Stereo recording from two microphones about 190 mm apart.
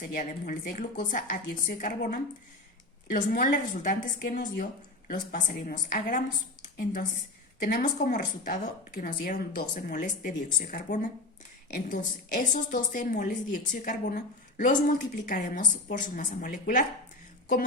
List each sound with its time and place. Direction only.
0.0 s a woman's voice: 45° left (ahead or behind)
7.6 s a woman's voice: 40° left (ahead or behind)